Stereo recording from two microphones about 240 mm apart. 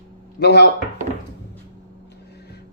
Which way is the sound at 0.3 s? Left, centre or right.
Left.